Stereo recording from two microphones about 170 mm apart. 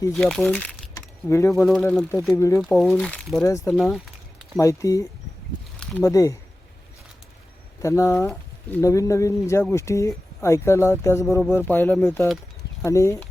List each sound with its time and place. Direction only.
0.1 s speech: 5° left (ahead or behind)
1.3 s speech: 15° left (ahead or behind)
2.6 s speech: centre (ahead or behind)
3.4 s speech: 15° left (ahead or behind)
3.7 s a sound: centre (ahead or behind)
4.6 s speech: 20° left (ahead or behind)
7.8 s speech: 15° left (ahead or behind)